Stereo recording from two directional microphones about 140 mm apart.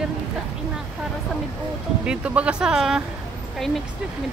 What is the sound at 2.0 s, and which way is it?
Speech, 10° right (ahead or behind).